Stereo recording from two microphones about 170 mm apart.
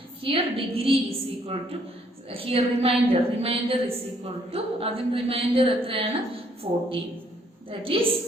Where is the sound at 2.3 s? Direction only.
35° right (ahead or behind).